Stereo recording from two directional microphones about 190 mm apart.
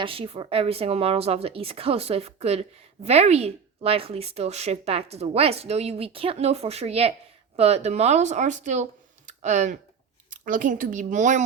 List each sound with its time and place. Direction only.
0.0 s speech: 30° right (ahead or behind)